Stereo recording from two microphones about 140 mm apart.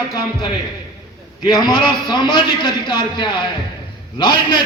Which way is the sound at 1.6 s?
35° left (ahead or behind).